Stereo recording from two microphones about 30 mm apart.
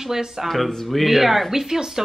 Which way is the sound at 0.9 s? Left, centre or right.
Centre.